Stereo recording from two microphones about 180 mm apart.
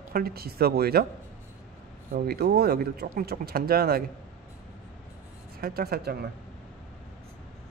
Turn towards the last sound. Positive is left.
turn(degrees=-60)  # may be behind; listen again after turning